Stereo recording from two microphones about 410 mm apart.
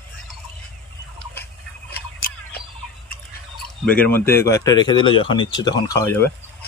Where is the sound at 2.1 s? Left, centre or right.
Left.